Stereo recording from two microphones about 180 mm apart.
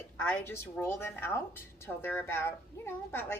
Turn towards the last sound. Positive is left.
turn(degrees=15)  # may be behind; listen again after turning